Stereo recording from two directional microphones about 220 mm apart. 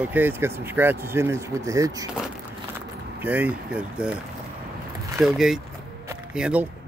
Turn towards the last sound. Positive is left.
turn(degrees=-5)  # may be behind; listen again after turning